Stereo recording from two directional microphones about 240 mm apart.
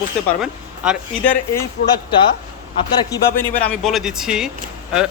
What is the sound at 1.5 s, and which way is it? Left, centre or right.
Speech, centre.